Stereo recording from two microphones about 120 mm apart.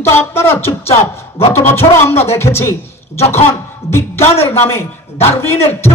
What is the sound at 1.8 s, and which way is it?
Speech, 20° left (ahead or behind).